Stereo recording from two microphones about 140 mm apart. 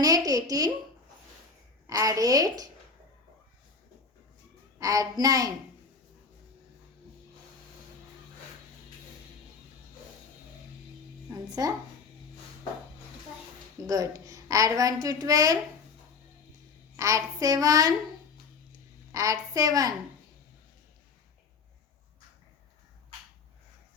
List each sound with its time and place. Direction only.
0.0 s a sound: 25° right (ahead or behind)
1.9 s a woman's voice: 25° right (ahead or behind)
4.8 s a woman's voice: 25° right (ahead or behind)
11.4 s a woman's voice: 25° right (ahead or behind)
13.8 s a woman's voice: 25° right (ahead or behind)
17.0 s a woman's voice: 25° right (ahead or behind)
19.1 s a woman's voice: 25° right (ahead or behind)